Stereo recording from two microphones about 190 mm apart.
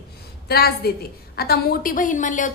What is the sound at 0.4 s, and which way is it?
A woman's voice, 55° left (ahead or behind).